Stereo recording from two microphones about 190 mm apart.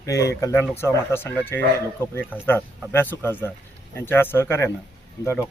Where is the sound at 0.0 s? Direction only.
15° left (ahead or behind).